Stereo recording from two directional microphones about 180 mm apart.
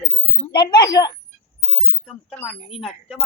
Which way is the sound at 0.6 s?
25° left (ahead or behind).